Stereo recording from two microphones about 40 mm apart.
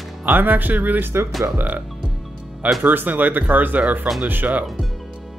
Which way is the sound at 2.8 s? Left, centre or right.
Right.